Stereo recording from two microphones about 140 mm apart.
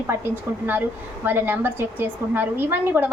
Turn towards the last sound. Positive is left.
turn(degrees=-15)  # may be behind; listen again after turning